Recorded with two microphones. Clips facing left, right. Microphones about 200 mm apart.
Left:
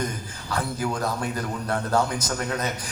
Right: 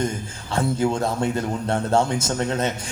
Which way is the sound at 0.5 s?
25° right (ahead or behind).